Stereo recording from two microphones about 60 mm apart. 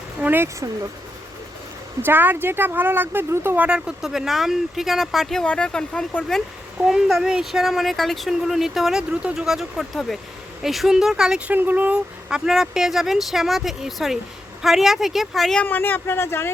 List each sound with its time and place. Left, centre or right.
0.2 s speech: right
2.0 s speech: right
3.5 s speech: right
3.8 s speech: centre
5.5 s speech: centre
6.8 s speech: centre
11.5 s speech: right
11.9 s speech: centre
15.6 s speech: left